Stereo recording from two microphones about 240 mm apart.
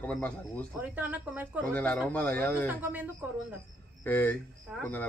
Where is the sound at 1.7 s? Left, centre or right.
Centre.